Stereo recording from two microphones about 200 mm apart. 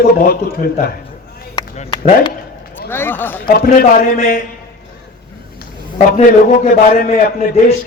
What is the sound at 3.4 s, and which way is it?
Speech, 45° left (ahead or behind).